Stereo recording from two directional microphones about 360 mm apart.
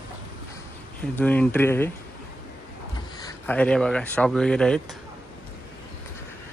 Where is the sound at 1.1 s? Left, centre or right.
Centre.